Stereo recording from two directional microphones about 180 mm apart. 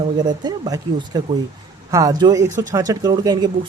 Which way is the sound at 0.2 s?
25° right (ahead or behind).